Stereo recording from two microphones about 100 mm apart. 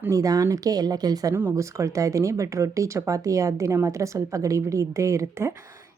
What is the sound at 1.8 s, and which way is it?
Speech, 35° right (ahead or behind).